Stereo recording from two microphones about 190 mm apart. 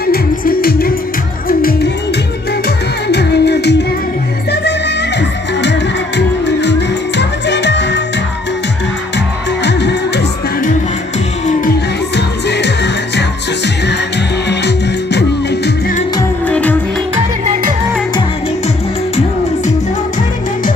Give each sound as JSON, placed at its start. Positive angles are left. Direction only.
{"t": 0.0, "sound": "music", "side_deg": 50}
{"t": 3.1, "sound": "music", "side_deg": 60}
{"t": 9.6, "sound": "music", "side_deg": 65}
{"t": 12.2, "sound": "music", "side_deg": 65}
{"t": 14.5, "sound": "music", "side_deg": 65}
{"t": 16.2, "sound": "music", "side_deg": 10}